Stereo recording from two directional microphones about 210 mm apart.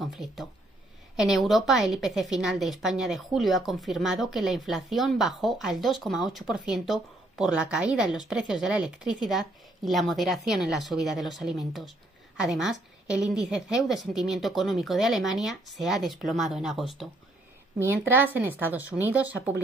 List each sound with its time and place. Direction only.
0.0 s speech: centre (ahead or behind)